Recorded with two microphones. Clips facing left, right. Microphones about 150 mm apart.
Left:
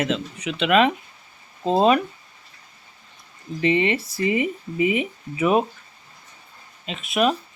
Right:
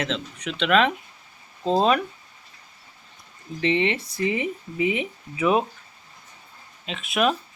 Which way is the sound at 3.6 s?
5° left (ahead or behind).